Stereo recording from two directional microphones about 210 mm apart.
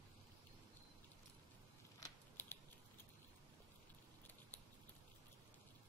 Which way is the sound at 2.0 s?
10° left (ahead or behind).